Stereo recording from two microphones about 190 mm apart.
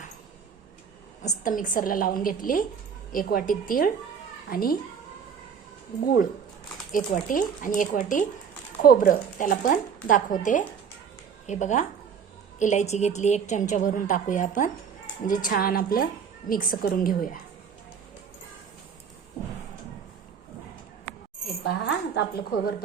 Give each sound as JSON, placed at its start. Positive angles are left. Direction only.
{"t": 1.2, "sound": "speech", "side_deg": 45}
{"t": 6.9, "sound": "a woman's voice", "side_deg": 45}
{"t": 21.6, "sound": "a woman's voice", "side_deg": 65}